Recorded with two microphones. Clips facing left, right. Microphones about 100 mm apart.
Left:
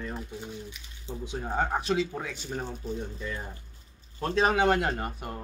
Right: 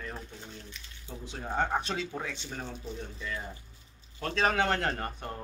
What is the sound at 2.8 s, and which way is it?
Speech, 45° left (ahead or behind).